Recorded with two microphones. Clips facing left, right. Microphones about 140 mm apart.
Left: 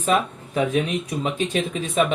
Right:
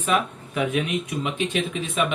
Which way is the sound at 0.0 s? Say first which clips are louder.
Left 2 dB; 35° left (ahead or behind).